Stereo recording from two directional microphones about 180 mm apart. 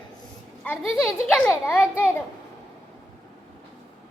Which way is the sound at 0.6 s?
5° left (ahead or behind).